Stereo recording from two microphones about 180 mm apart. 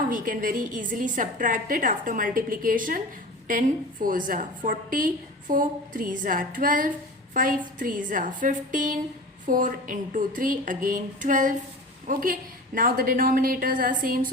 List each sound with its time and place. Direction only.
0.1 s a woman's voice: 50° right (ahead or behind)